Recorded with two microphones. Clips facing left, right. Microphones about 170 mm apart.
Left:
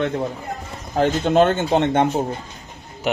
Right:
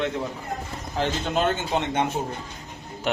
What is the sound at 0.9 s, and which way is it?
A man's voice, 45° left (ahead or behind).